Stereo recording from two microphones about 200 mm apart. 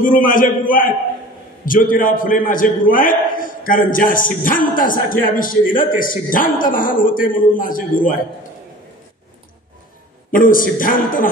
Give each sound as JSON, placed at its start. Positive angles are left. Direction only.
{"t": 0.0, "sound": "a man's voice", "side_deg": 45}
{"t": 10.3, "sound": "a man's voice", "side_deg": 45}